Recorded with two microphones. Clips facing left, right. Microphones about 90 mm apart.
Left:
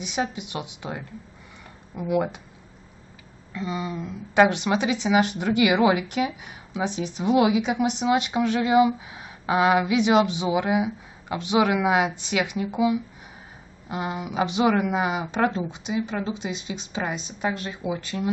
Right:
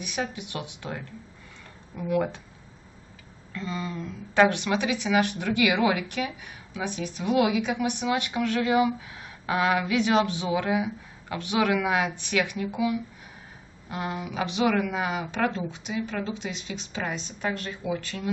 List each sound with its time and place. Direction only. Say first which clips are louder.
0.0 s speech: left 4 dB; 20° left (ahead or behind)
3.5 s speech: left 3 dB; 15° left (ahead or behind)
15.3 s speech: left 3 dB; 25° left (ahead or behind)